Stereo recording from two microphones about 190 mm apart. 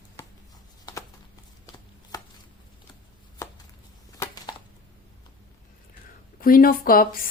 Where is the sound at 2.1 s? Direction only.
20° left (ahead or behind).